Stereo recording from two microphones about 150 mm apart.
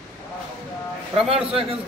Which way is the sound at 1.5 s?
40° right (ahead or behind).